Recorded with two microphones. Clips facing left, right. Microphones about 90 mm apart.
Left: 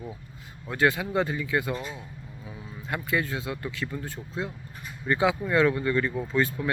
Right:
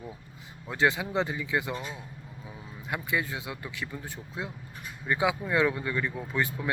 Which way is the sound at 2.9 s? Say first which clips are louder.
Left 3 dB; 15° right (ahead or behind).